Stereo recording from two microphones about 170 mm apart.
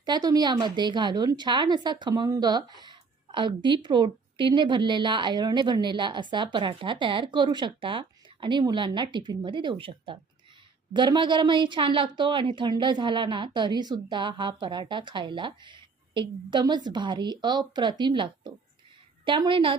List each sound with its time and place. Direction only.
0.0 s a woman's voice: 25° right (ahead or behind)